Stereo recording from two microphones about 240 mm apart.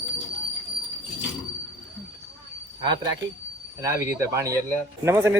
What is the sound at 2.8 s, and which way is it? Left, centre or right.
Speech, centre.